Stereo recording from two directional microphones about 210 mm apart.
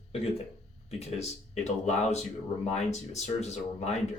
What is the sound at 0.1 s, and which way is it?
Speech, 30° left (ahead or behind).